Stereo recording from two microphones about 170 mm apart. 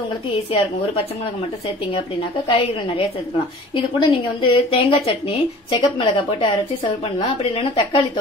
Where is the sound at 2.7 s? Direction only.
30° left (ahead or behind).